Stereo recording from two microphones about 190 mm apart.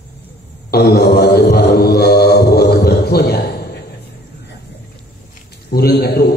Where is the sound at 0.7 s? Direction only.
60° left (ahead or behind).